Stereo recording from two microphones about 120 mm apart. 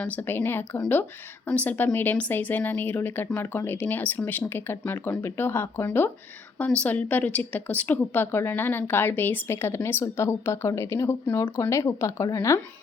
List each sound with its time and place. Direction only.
0.0 s speech: 15° left (ahead or behind)